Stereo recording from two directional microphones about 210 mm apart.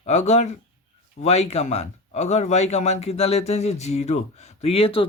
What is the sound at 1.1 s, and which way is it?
Speech, 30° left (ahead or behind).